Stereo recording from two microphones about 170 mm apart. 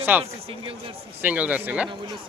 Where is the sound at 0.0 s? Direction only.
10° right (ahead or behind).